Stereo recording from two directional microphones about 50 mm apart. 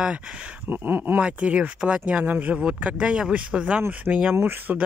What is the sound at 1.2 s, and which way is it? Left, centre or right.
Speech, right.